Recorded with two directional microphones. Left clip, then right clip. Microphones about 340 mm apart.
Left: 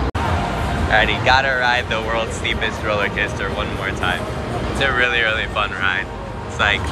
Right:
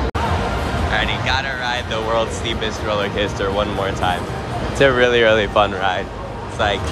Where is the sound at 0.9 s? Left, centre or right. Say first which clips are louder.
Left 6 dB; centre.